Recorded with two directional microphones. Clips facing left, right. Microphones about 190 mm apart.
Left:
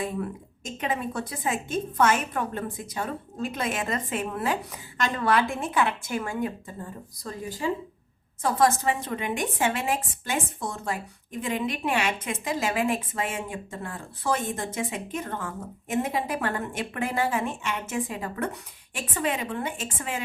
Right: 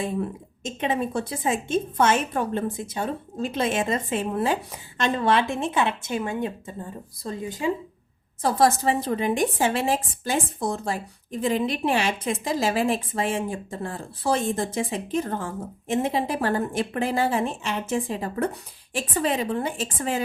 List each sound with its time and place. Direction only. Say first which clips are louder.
0.0 s speech: right 3 dB; 25° right (ahead or behind)
8.4 s a woman's voice: right 2 dB; 35° right (ahead or behind)